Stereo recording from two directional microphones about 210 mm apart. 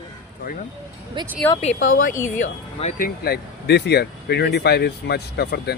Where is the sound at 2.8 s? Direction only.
45° left (ahead or behind).